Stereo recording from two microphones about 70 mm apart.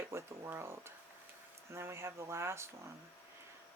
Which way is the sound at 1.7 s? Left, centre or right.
Right.